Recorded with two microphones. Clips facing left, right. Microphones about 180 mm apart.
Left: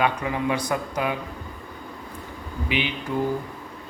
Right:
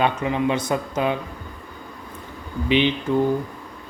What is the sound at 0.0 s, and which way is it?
Speech, 25° right (ahead or behind).